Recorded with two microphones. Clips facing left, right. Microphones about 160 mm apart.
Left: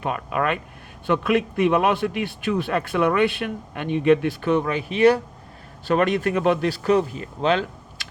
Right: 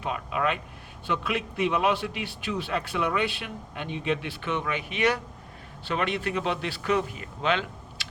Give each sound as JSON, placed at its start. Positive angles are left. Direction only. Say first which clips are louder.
{"t": 0.0, "sound": "a man's voice", "louder": "left 4 dB", "side_deg": 55}
{"t": 5.9, "sound": "a man's voice", "louder": "left 8 dB", "side_deg": 45}